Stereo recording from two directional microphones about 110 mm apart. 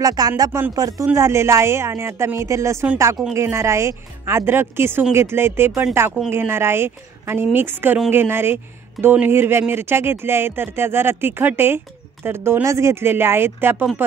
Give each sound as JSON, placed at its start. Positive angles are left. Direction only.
{"t": 0.0, "sound": "speech", "side_deg": -35}
{"t": 0.5, "sound": "speech", "side_deg": -20}
{"t": 0.7, "sound": "speech", "side_deg": -35}